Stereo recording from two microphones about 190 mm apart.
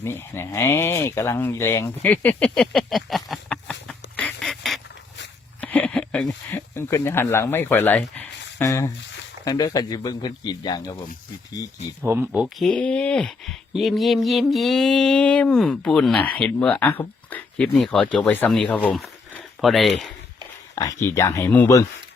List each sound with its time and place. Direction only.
0.0 s speech: 10° left (ahead or behind)
4.2 s duck: 5° left (ahead or behind)
5.5 s a sound: 5° left (ahead or behind)
9.4 s speech: 20° left (ahead or behind)
12.0 s speech: 10° right (ahead or behind)
20.7 s speech: 15° left (ahead or behind)